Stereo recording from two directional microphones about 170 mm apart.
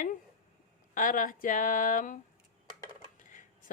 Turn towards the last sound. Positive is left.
turn(degrees=50)  # may be behind; listen again after turning